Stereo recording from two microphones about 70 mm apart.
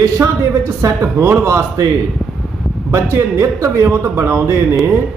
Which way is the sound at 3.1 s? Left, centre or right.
Right.